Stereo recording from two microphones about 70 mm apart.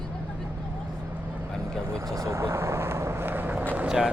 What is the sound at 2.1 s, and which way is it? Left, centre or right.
Vehicle, right.